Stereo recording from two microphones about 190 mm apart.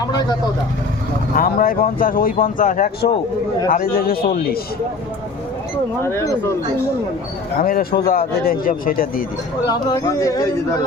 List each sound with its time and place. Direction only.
0.0 s speech: 20° left (ahead or behind)
1.4 s speech: 50° left (ahead or behind)
6.0 s speech: 15° left (ahead or behind)
7.6 s speech: 50° left (ahead or behind)
9.6 s speech: 20° left (ahead or behind)